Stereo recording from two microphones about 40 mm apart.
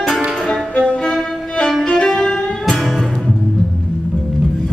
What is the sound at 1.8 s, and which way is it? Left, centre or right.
Music, centre.